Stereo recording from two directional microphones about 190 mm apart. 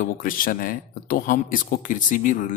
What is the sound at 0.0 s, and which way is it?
Speech, 45° left (ahead or behind).